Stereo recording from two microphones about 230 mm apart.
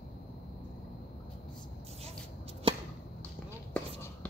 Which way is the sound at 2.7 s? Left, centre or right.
Right.